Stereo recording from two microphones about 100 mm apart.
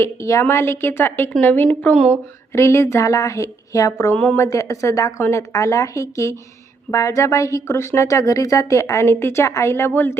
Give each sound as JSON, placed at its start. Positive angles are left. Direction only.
{"t": 0.0, "sound": "a woman's voice", "side_deg": 30}
{"t": 4.1, "sound": "speech", "side_deg": 15}
{"t": 4.4, "sound": "a woman's voice", "side_deg": 30}